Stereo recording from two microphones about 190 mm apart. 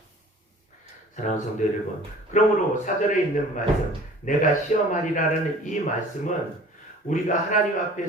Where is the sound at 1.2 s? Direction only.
40° left (ahead or behind).